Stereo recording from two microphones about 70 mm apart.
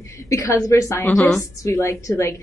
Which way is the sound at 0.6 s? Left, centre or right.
Left.